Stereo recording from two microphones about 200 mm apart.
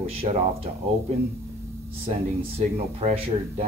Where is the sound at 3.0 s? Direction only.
30° right (ahead or behind).